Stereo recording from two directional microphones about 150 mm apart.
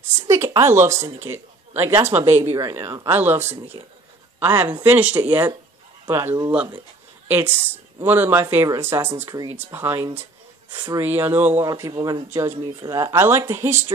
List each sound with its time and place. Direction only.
0.3 s speech: 20° right (ahead or behind)
3.8 s speech: 35° right (ahead or behind)
4.4 s speech: 15° right (ahead or behind)